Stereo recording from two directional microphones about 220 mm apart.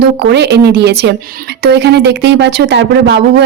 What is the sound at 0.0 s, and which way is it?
Speech, 50° right (ahead or behind).